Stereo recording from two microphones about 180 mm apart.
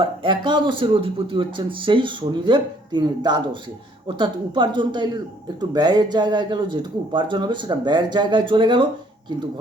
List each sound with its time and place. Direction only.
0.0 s speech: 25° right (ahead or behind)